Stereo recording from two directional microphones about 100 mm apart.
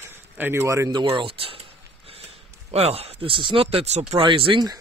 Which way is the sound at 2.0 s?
80° right.